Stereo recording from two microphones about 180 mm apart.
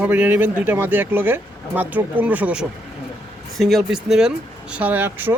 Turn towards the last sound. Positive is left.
turn(degrees=-10)  # may be behind; listen again after turning